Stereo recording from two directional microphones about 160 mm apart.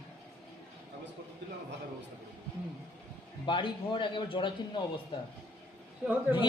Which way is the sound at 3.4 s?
30° left (ahead or behind).